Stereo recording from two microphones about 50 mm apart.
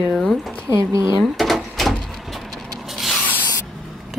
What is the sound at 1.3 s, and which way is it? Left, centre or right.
Rub, centre.